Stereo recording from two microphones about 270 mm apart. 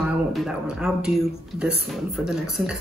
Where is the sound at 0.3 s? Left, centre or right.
Centre.